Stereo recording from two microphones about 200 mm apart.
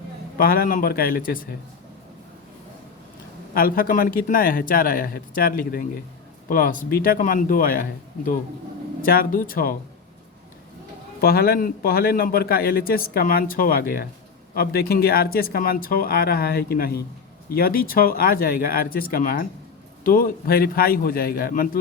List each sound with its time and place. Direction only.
0.3 s a man's voice: 45° left (ahead or behind)
3.5 s a man's voice: 45° left (ahead or behind)
11.2 s a man's voice: 50° left (ahead or behind)